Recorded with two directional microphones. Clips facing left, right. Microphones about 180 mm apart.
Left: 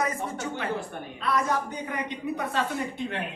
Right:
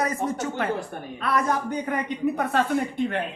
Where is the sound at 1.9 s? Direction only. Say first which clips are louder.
Right 6 dB; 55° right (ahead or behind).